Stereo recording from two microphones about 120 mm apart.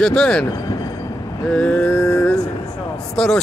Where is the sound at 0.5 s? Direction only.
25° left (ahead or behind).